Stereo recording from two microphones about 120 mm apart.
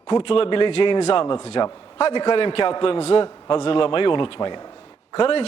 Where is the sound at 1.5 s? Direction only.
40° left (ahead or behind).